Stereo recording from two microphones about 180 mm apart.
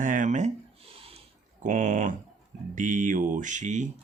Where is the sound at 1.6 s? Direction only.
45° right (ahead or behind).